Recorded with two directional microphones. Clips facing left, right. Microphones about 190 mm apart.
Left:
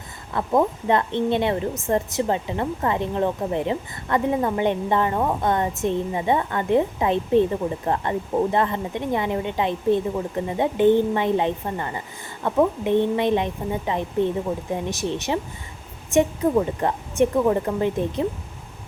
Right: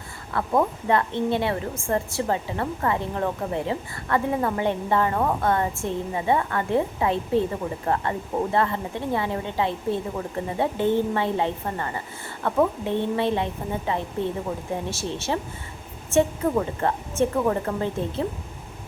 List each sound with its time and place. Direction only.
0.3 s a woman's voice: 20° left (ahead or behind)